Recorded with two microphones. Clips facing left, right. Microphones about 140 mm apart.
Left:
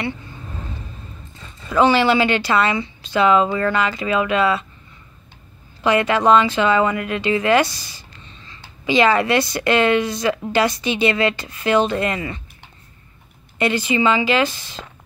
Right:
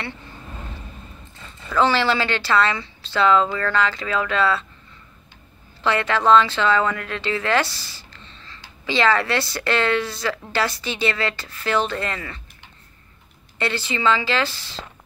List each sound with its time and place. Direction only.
1.7 s speech: 15° left (ahead or behind)
5.9 s speech: 15° left (ahead or behind)
13.6 s speech: 15° left (ahead or behind)